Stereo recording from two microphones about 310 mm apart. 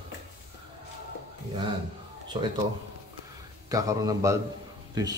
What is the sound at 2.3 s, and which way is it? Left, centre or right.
Speech, centre.